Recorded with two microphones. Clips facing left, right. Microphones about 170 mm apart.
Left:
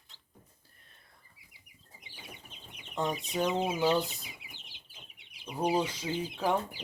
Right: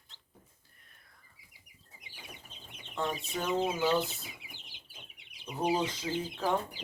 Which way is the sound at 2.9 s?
15° left (ahead or behind).